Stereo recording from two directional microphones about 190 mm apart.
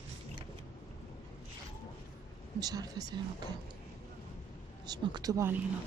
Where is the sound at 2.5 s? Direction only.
20° right (ahead or behind).